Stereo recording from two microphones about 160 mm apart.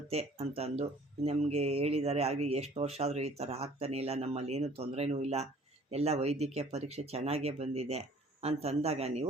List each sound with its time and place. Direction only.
0.1 s speech: 40° right (ahead or behind)